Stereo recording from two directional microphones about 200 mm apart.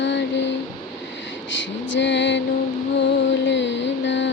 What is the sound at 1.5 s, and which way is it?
Female singing, 65° left (ahead or behind).